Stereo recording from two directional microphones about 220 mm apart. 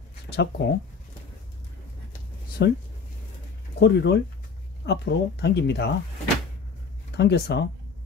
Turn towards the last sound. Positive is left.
turn(degrees=50)  # may be behind; listen again after turning